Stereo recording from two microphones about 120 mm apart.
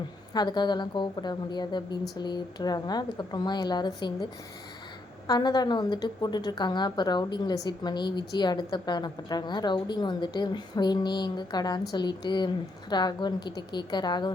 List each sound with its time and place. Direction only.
0.3 s a woman's voice: 35° left (ahead or behind)
5.3 s a woman's voice: 35° left (ahead or behind)